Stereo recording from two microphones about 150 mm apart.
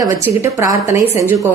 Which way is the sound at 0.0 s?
20° right (ahead or behind).